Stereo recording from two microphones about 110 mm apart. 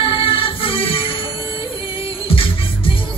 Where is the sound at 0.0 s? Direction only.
55° left (ahead or behind).